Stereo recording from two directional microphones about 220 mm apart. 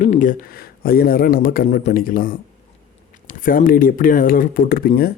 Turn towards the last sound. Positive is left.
turn(degrees=45)  # may be behind; listen again after turning